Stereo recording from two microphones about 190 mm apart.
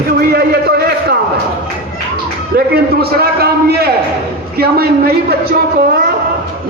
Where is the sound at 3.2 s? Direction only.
55° right (ahead or behind).